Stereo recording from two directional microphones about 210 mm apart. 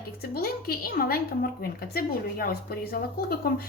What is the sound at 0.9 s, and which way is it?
A woman's voice, 45° left (ahead or behind).